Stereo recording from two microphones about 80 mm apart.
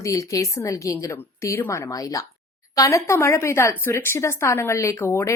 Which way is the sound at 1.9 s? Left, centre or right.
Left.